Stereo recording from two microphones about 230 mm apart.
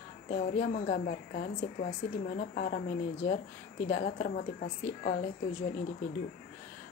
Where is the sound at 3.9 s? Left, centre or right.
Left.